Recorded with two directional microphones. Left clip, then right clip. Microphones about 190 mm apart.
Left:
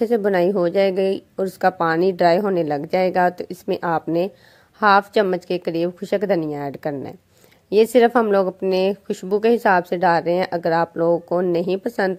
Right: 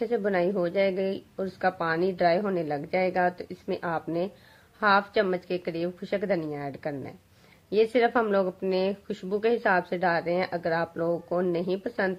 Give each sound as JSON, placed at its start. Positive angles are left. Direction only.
{"t": 0.0, "sound": "speech", "side_deg": 45}